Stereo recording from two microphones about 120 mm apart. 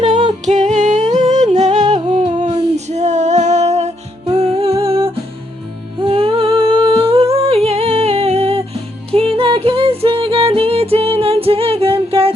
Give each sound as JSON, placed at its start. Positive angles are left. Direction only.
{"t": 0.4, "sound": "humming", "side_deg": -80}
{"t": 2.4, "sound": "music", "side_deg": -65}
{"t": 6.6, "sound": "humming", "side_deg": -45}
{"t": 9.1, "sound": "music", "side_deg": -50}